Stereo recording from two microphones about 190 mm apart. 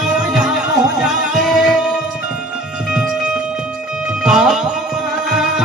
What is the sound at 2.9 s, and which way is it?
Music, 5° right (ahead or behind).